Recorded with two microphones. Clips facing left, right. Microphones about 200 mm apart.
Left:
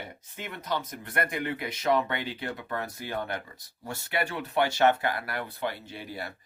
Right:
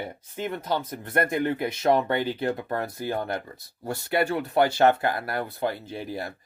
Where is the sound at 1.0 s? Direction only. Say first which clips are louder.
Right 6 dB; 45° right (ahead or behind).